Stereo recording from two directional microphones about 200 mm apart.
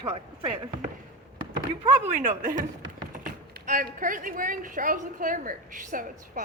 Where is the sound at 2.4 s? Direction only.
40° right (ahead or behind).